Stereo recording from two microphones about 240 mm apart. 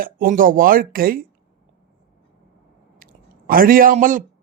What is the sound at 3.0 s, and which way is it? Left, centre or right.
Chewing, right.